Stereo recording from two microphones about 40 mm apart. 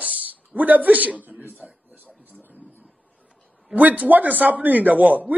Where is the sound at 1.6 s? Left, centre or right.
Right.